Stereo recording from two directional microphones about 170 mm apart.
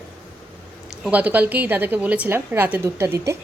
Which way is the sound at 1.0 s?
10° right (ahead or behind).